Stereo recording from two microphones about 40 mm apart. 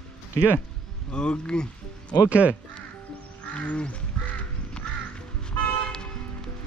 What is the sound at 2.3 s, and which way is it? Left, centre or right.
Speech, right.